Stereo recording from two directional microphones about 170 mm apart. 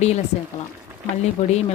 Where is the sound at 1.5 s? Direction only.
40° left (ahead or behind).